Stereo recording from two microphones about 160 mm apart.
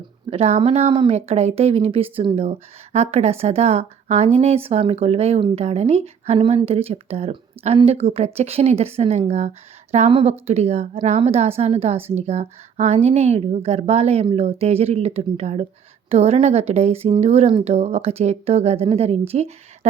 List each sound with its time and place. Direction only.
0.3 s speech: 40° right (ahead or behind)